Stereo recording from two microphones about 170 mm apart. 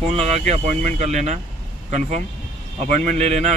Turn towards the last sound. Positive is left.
turn(degrees=-40)  # may be behind; listen again after turning